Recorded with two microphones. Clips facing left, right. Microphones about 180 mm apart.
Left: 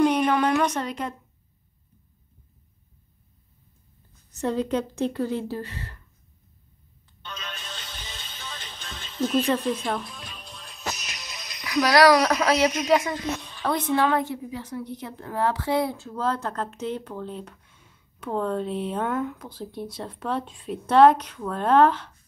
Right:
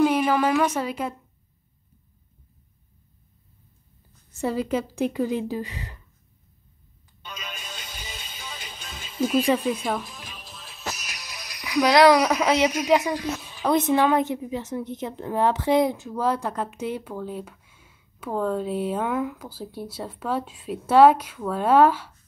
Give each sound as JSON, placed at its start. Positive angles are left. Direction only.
{"t": 0.0, "sound": "a sound", "side_deg": -5}
{"t": 4.4, "sound": "a woman's voice", "side_deg": -10}
{"t": 7.2, "sound": "music", "side_deg": -10}
{"t": 12.2, "sound": "a woman's voice", "side_deg": -10}
{"t": 13.7, "sound": "a woman's voice", "side_deg": -20}